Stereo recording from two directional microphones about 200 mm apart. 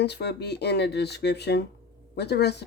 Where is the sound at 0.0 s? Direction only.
55° left (ahead or behind).